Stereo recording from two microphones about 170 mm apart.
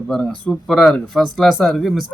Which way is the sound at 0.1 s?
5° left (ahead or behind).